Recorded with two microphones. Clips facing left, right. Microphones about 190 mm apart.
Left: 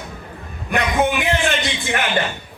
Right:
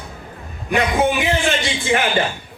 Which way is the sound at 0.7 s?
55° left (ahead or behind).